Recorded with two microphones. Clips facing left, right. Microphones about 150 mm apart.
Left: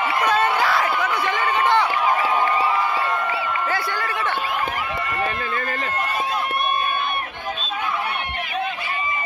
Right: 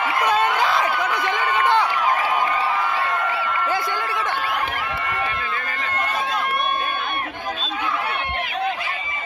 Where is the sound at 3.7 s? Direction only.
15° right (ahead or behind).